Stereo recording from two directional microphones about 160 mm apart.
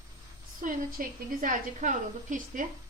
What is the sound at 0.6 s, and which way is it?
A woman's voice, 60° right (ahead or behind).